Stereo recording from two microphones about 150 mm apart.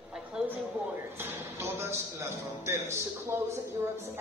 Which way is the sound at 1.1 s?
15° right (ahead or behind).